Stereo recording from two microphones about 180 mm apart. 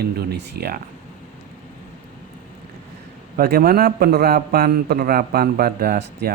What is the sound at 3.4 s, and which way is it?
A man's voice, 60° right (ahead or behind).